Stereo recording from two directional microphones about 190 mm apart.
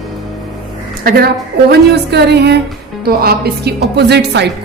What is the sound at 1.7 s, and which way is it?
A woman's voice, 60° right (ahead or behind).